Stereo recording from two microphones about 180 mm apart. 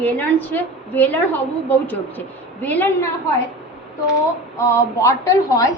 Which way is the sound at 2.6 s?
10° left (ahead or behind).